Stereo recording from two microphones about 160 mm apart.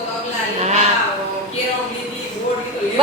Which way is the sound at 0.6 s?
45° right (ahead or behind).